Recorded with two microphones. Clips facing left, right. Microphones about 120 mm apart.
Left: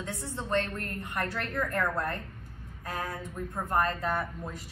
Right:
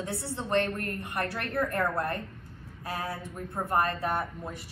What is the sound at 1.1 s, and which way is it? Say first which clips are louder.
Speech: right 1 dB; 30° right (ahead or behind).